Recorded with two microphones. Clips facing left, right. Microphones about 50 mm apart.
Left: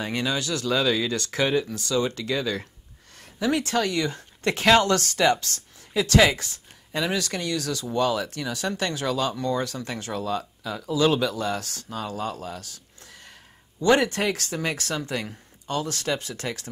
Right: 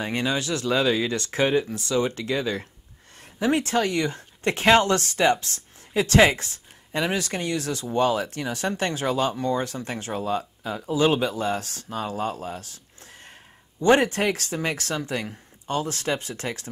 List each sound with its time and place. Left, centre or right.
0.0 s speech: right